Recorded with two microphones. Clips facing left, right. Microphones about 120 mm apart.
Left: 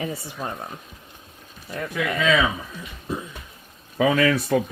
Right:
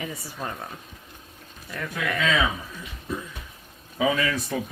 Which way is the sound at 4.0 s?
65° left (ahead or behind).